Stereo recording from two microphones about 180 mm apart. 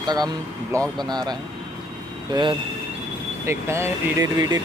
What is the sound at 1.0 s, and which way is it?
Speech, 25° right (ahead or behind).